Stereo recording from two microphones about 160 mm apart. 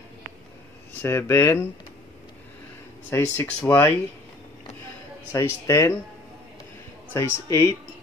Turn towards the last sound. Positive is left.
turn(degrees=15)  # may be behind; listen again after turning